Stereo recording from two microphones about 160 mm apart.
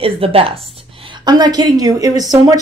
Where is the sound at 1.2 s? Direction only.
25° right (ahead or behind).